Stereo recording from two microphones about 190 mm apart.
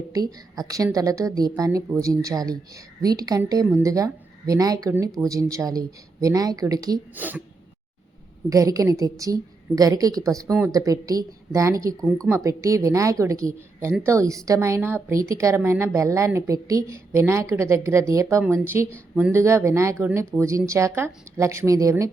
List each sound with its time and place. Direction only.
0.1 s a woman's voice: 20° right (ahead or behind)
8.4 s a woman's voice: 15° right (ahead or behind)